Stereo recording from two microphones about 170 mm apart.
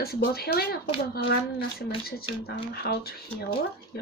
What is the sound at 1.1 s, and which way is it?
Speech, 65° left (ahead or behind).